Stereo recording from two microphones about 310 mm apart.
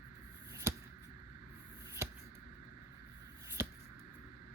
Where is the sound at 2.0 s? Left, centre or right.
Centre.